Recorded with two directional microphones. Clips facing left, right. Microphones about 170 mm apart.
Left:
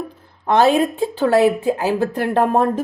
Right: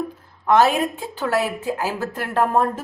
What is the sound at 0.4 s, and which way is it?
A woman's voice, 25° left (ahead or behind).